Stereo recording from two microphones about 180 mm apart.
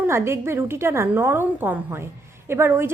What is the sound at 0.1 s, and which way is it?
A woman's voice, 15° right (ahead or behind).